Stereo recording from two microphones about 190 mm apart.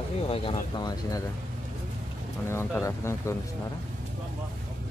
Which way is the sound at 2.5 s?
15° left (ahead or behind).